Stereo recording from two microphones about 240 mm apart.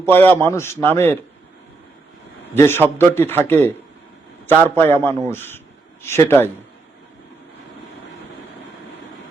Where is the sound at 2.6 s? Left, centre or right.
Centre.